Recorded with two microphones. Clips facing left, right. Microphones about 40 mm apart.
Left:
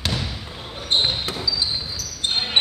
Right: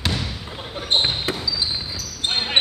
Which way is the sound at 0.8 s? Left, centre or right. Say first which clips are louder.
Even; centre.